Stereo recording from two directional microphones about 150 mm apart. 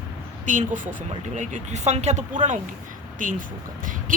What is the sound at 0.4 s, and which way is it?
Speech, 55° right (ahead or behind).